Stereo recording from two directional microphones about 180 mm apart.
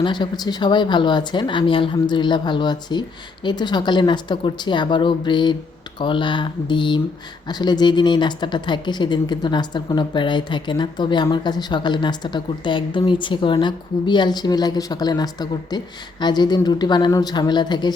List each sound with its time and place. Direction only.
0.0 s a woman's voice: 25° left (ahead or behind)